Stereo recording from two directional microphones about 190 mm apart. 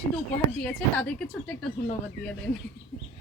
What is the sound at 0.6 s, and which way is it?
Speech, 10° left (ahead or behind).